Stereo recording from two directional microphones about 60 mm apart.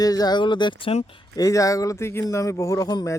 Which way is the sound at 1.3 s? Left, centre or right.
Left.